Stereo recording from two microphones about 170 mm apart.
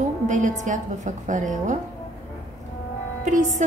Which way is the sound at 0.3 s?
45° right (ahead or behind).